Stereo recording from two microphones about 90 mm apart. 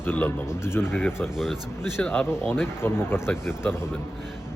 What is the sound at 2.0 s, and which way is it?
Speech, 15° left (ahead or behind).